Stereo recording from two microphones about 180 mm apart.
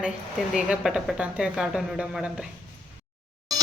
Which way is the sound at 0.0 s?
5° right (ahead or behind).